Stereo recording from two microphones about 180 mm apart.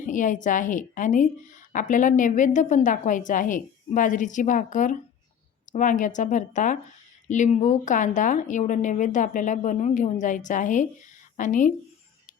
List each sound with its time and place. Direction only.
0.0 s a woman's voice: 45° left (ahead or behind)